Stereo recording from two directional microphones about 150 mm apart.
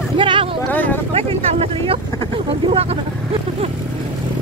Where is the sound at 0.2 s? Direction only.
35° right (ahead or behind).